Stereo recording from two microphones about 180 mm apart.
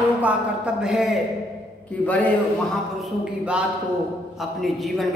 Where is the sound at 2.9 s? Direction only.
5° right (ahead or behind).